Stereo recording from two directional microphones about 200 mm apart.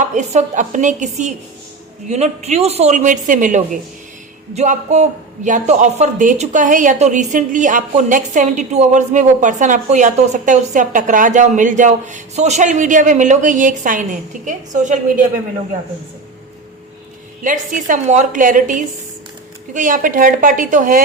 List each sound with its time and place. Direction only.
0.0 s a woman's voice: 35° right (ahead or behind)
17.4 s a woman's voice: 40° right (ahead or behind)